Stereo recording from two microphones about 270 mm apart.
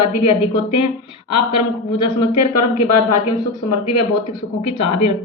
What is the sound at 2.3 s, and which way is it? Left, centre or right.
Speech, left.